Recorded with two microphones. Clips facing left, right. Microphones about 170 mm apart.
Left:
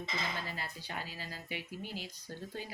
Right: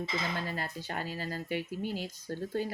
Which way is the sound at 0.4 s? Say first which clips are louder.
Right 6 dB; 45° right (ahead or behind).